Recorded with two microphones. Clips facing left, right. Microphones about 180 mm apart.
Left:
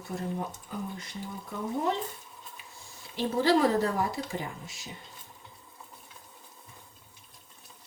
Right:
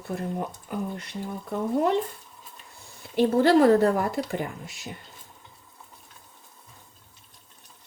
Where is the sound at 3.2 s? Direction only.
55° right (ahead or behind).